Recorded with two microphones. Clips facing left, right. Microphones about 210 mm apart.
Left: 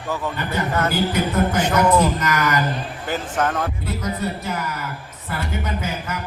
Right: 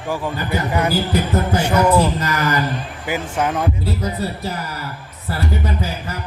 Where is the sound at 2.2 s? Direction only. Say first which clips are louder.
Right 1 dB; 30° right (ahead or behind).